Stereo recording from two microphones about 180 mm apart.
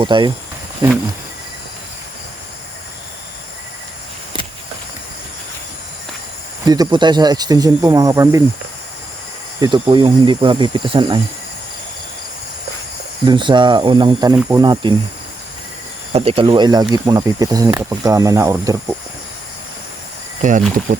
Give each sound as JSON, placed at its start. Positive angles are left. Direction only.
{"t": 0.0, "sound": "speech", "side_deg": -25}
{"t": 6.7, "sound": "speech", "side_deg": -25}
{"t": 9.6, "sound": "speech", "side_deg": -25}
{"t": 13.2, "sound": "speech", "side_deg": -25}
{"t": 16.1, "sound": "speech", "side_deg": -30}
{"t": 20.4, "sound": "speech", "side_deg": -45}